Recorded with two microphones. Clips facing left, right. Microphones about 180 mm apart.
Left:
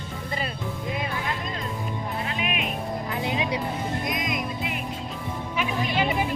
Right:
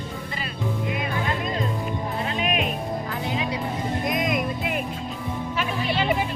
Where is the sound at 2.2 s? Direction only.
40° right (ahead or behind).